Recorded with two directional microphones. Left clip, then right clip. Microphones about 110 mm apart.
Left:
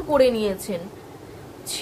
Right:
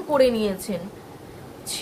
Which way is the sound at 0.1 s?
25° left (ahead or behind).